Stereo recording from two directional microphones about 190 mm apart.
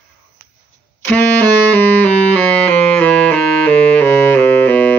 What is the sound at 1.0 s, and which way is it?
Saxophone, 10° left (ahead or behind).